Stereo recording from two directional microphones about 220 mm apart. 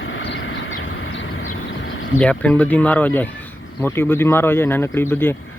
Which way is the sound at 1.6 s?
60° left (ahead or behind).